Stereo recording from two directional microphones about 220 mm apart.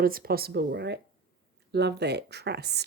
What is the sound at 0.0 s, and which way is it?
Speech, 40° right (ahead or behind).